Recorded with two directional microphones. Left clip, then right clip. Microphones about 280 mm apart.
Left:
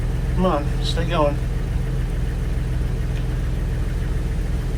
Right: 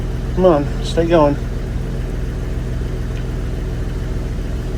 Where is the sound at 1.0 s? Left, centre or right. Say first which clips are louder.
Right 8 dB; right.